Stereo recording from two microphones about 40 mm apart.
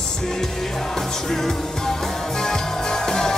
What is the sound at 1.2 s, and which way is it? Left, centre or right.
Music, centre.